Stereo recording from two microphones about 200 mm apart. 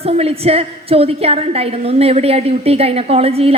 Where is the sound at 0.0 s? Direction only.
30° right (ahead or behind).